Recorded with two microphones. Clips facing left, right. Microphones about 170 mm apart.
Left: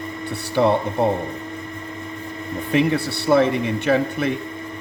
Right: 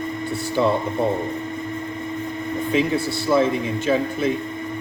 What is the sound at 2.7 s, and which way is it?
Speech, 65° left (ahead or behind).